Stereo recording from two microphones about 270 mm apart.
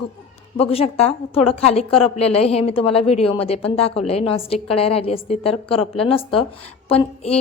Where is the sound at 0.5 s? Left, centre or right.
Left.